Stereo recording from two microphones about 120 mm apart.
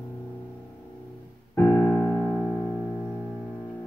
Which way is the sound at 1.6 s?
20° left (ahead or behind).